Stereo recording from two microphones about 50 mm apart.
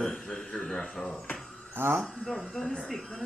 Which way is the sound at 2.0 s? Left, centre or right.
Centre.